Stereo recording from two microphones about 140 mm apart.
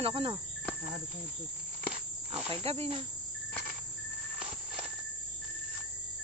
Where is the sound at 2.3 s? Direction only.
40° right (ahead or behind).